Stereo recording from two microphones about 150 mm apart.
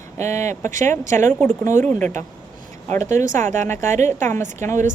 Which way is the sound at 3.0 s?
55° right (ahead or behind).